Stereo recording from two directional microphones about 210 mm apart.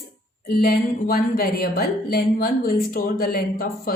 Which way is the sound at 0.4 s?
45° left (ahead or behind).